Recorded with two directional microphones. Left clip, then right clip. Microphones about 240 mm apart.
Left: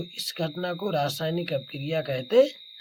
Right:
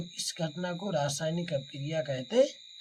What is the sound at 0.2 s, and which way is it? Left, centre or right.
Speech, left.